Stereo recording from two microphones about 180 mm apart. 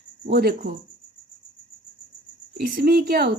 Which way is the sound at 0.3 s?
60° right (ahead or behind).